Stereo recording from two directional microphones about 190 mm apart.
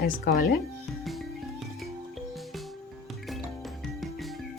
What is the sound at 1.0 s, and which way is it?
Music, centre (ahead or behind).